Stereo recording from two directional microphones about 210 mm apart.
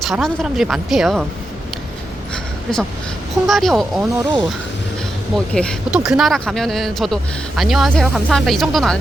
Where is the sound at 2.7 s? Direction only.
Centre (ahead or behind).